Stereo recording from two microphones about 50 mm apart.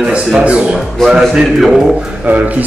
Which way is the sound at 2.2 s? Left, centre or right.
Right.